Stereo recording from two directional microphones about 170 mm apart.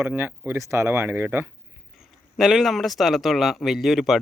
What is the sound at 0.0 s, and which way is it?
Speech, 10° right (ahead or behind).